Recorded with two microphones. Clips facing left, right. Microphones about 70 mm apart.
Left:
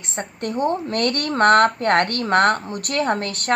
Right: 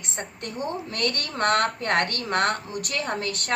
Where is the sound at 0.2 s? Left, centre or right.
Left.